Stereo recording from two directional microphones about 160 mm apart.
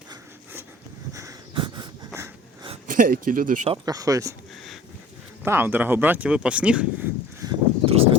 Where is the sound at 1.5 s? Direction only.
30° right (ahead or behind).